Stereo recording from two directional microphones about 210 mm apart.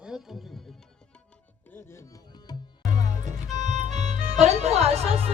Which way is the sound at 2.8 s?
35° right (ahead or behind).